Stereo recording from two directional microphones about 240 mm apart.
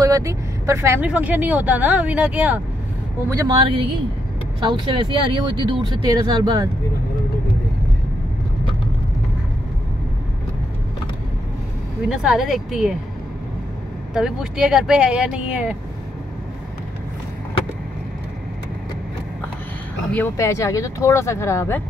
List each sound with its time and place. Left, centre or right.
0.0 s speech: centre
12.1 s speech: centre
14.1 s speech: centre
20.1 s speech: centre